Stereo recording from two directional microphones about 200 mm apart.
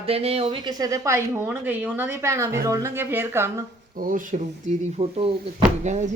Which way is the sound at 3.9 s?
45° right (ahead or behind).